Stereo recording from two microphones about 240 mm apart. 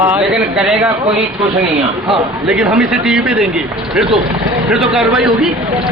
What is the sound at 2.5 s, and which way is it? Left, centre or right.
A man's voice, centre.